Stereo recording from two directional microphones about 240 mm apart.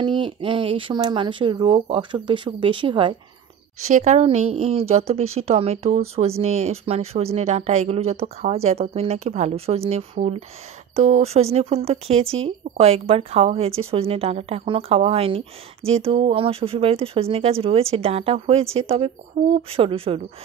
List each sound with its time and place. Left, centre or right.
0.0 s speech: centre